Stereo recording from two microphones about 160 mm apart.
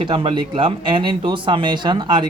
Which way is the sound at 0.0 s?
30° right (ahead or behind).